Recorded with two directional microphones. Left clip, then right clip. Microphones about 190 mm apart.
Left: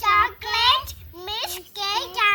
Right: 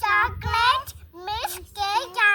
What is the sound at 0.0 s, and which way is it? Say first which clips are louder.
Child singing: left 2 dB; 15° right (ahead or behind).